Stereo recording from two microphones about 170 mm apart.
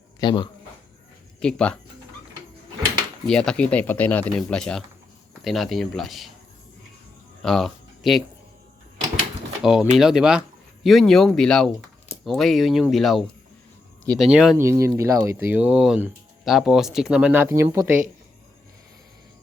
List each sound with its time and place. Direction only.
0.2 s speech: 25° left (ahead or behind)
1.4 s speech: 5° left (ahead or behind)
3.2 s speech: 5° left (ahead or behind)
7.4 s speech: centre (ahead or behind)
9.6 s speech: 5° right (ahead or behind)
14.6 s speech: 15° right (ahead or behind)